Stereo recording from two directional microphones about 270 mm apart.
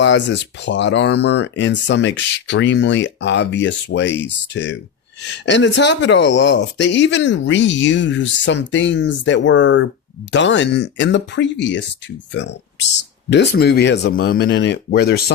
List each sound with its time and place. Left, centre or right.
0.0 s speech: left